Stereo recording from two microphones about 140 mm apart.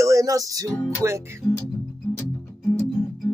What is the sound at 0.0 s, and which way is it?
Music, 25° right (ahead or behind).